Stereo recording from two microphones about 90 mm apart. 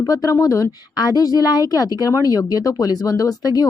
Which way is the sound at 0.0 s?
40° left (ahead or behind).